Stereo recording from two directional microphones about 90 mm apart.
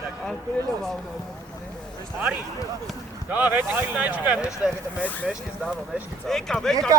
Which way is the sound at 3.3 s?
20° right (ahead or behind).